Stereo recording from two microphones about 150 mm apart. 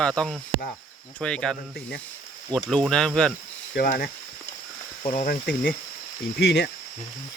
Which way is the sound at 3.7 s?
90° left.